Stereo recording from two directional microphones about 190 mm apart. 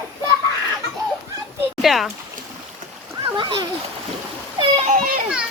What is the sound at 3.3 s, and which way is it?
Speech, 25° right (ahead or behind).